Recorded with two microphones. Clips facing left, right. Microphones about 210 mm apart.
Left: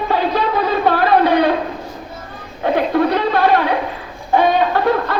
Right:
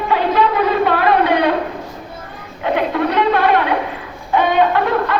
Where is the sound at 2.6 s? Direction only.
40° left (ahead or behind).